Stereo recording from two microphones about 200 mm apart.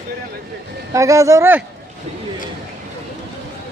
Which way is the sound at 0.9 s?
15° right (ahead or behind).